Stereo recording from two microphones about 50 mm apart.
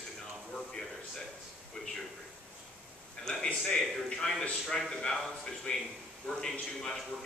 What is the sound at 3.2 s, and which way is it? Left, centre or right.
A man's voice, centre.